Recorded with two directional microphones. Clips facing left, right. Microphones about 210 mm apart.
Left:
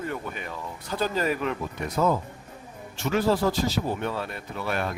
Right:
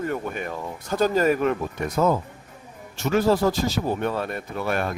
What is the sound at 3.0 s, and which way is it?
Speech, 45° right (ahead or behind).